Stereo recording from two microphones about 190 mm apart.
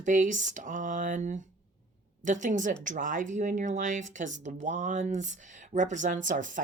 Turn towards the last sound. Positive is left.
turn(degrees=-40)  # may be behind; listen again after turning